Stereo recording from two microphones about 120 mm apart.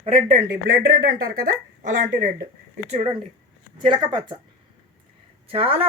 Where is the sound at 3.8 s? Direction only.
40° right (ahead or behind).